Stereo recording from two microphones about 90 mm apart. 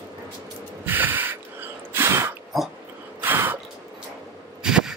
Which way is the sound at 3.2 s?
20° right (ahead or behind).